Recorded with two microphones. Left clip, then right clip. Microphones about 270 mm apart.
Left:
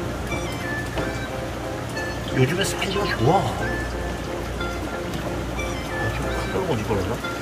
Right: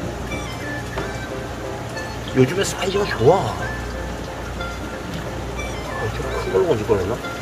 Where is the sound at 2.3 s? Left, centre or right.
Right.